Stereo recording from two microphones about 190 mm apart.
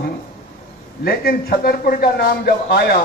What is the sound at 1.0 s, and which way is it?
A man's voice, 55° left (ahead or behind).